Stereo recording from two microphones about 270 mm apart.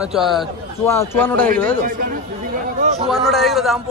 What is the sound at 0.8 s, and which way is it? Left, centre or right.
Speech, centre.